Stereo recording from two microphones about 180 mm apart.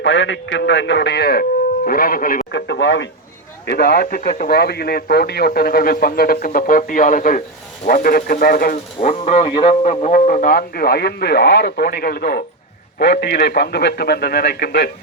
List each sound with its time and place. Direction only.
0.0 s a man's voice: 90° left; by 2.5 s 50° left (ahead or behind)
2.5 s speech: 75° left (ahead or behind)
3.7 s speech: 65° left (ahead or behind)
9.0 s speech: 35° left (ahead or behind); by 14.8 s 60° left (ahead or behind)